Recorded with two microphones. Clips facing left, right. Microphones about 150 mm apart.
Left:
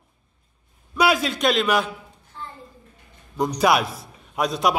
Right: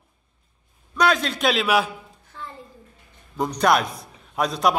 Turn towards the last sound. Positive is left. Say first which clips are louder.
# even
turn(degrees=0)  # may be behind; listen again after turning